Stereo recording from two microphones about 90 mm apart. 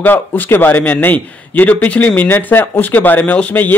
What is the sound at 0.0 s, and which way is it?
Speech, 25° left (ahead or behind).